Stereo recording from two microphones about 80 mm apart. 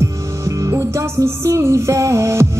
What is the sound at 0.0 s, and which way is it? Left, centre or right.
Music, right.